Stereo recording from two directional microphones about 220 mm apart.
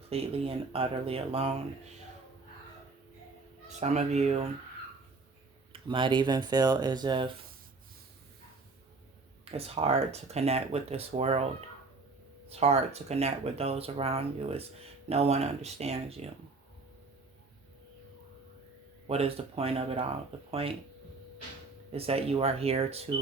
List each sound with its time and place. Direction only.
0.1 s speech: 25° right (ahead or behind)
3.7 s speech: 30° right (ahead or behind)
5.7 s speech: 20° right (ahead or behind)
9.4 s speech: 25° right (ahead or behind)
12.5 s speech: 30° right (ahead or behind)
19.0 s speech: 25° right (ahead or behind)
21.9 s speech: 25° right (ahead or behind)